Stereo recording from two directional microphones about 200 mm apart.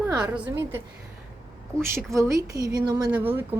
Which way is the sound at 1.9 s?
15° right (ahead or behind).